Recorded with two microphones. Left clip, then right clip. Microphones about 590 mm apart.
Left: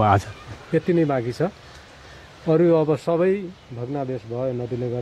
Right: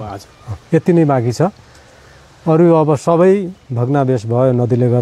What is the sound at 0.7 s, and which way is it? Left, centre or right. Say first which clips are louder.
A man's voice: right 8 dB; right.